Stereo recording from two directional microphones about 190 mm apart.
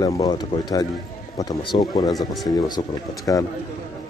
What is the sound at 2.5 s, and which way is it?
Speech, 20° left (ahead or behind).